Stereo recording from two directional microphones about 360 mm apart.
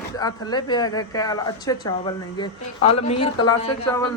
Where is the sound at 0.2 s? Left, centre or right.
Centre.